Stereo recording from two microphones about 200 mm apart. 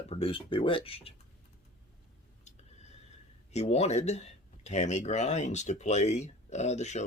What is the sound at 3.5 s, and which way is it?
Speech, 35° left (ahead or behind).